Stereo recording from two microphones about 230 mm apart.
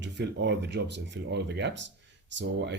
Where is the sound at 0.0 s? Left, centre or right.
Right.